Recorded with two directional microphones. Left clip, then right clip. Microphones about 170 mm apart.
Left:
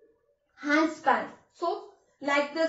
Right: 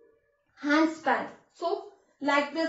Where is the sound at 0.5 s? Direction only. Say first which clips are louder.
Right 1 dB; 15° right (ahead or behind).